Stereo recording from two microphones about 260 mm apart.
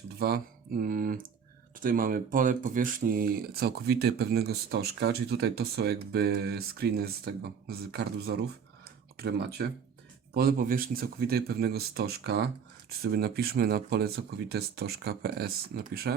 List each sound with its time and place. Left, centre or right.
0.2 s speech: right